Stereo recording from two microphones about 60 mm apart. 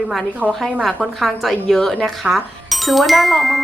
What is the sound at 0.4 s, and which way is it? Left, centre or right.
Speech, right.